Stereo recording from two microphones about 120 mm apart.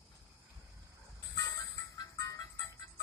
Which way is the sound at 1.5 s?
30° left (ahead or behind).